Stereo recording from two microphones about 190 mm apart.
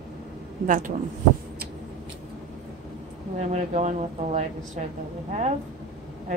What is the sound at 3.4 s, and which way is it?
Speech, 35° right (ahead or behind).